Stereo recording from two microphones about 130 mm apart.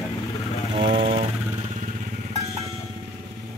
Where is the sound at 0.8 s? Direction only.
40° right (ahead or behind).